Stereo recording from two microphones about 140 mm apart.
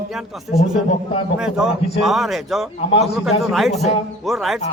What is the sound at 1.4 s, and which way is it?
A man's voice, 5° right (ahead or behind).